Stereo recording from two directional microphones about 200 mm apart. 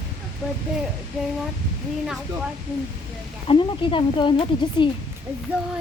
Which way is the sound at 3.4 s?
25° left (ahead or behind).